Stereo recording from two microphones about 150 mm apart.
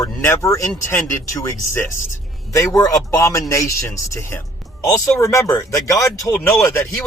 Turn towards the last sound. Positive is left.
turn(degrees=20)  # may be behind; listen again after turning